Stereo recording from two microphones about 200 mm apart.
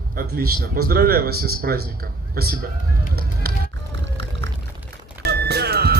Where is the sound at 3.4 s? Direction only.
50° right (ahead or behind).